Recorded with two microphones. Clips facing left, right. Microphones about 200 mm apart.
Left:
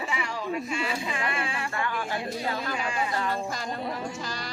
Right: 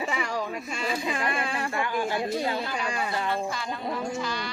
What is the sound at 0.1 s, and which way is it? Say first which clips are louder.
Speech: right 1 dB; 40° right (ahead or behind).